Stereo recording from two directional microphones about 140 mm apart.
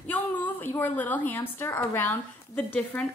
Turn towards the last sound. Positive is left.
turn(degrees=10)  # may be behind; listen again after turning